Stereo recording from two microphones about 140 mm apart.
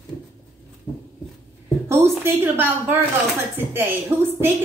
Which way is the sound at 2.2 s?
15° right (ahead or behind).